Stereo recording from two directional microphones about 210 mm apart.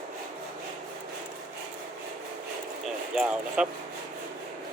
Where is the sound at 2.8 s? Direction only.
5° right (ahead or behind).